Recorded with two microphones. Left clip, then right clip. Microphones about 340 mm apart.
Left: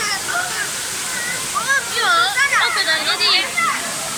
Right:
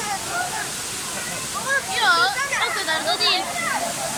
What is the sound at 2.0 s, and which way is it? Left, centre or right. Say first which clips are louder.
Children playing: left 2 dB; right.